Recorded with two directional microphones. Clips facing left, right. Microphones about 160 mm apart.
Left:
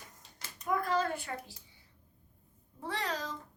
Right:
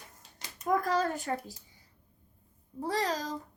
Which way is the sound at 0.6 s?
40° right (ahead or behind).